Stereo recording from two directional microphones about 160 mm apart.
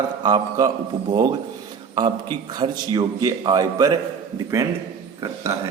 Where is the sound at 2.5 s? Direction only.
25° right (ahead or behind).